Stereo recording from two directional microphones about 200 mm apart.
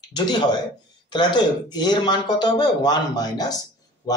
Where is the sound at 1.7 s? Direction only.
20° left (ahead or behind).